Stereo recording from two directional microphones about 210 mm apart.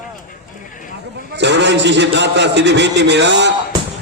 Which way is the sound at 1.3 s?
55° right (ahead or behind).